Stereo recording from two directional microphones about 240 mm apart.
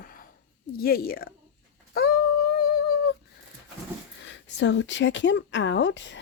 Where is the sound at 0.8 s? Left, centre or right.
Left.